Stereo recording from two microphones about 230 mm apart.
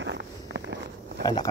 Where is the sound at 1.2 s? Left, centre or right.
Centre.